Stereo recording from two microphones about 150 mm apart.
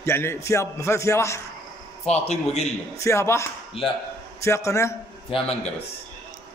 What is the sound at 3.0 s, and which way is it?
A man's voice, 20° left (ahead or behind).